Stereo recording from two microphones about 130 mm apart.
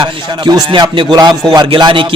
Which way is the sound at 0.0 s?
35° right (ahead or behind).